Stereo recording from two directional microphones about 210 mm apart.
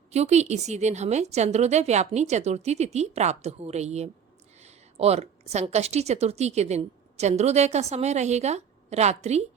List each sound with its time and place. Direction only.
0.1 s a woman's voice: 30° right (ahead or behind)